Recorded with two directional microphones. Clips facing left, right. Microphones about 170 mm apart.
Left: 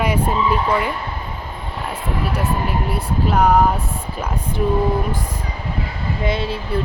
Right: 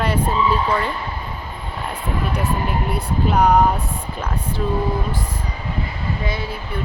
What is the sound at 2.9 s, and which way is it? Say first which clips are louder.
Vehicle: even; centre (ahead or behind).